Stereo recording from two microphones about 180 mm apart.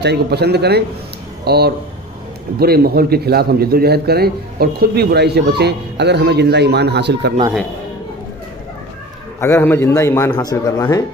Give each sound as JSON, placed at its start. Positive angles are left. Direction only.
{"t": 0.0, "sound": "a man's voice", "side_deg": -65}
{"t": 9.4, "sound": "a man's voice", "side_deg": 15}